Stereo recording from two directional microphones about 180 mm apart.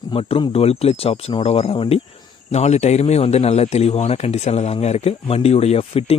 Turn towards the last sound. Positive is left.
turn(degrees=35)  # may be behind; listen again after turning